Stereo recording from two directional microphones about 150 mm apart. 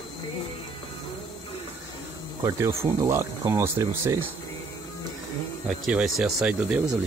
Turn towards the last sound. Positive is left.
turn(degrees=-5)  # may be behind; listen again after turning